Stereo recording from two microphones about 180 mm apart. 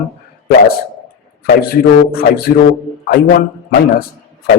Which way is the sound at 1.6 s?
60° left (ahead or behind).